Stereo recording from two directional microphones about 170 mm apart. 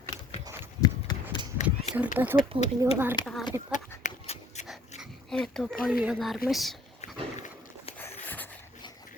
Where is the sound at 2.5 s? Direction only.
30° right (ahead or behind).